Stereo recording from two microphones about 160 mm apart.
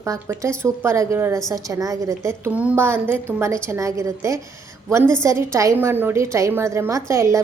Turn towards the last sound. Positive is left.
turn(degrees=-20)  # may be behind; listen again after turning